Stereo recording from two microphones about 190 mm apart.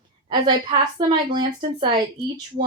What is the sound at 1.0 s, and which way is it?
Speech, 25° right (ahead or behind).